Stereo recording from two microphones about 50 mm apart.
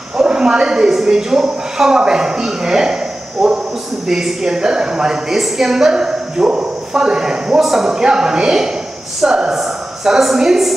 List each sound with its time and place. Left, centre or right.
0.2 s a woman's voice: centre
5.3 s a woman's voice: centre